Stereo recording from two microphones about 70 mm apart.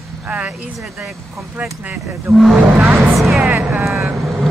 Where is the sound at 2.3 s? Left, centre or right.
Centre.